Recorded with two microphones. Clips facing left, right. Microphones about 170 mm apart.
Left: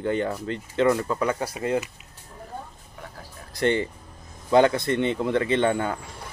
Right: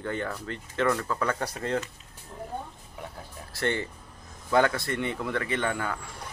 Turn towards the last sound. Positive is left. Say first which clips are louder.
# left 7 dB
turn(degrees=25)  # may be behind; listen again after turning